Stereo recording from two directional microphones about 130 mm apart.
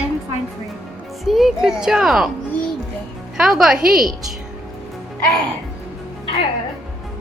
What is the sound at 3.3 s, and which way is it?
Speech, 5° right (ahead or behind).